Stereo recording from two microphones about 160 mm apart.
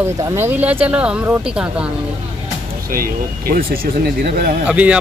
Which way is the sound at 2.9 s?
65° right (ahead or behind).